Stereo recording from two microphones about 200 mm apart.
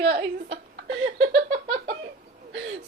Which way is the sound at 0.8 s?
60° right (ahead or behind).